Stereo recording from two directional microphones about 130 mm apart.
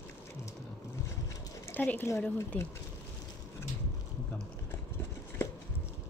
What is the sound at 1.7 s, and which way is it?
Speech, 15° left (ahead or behind).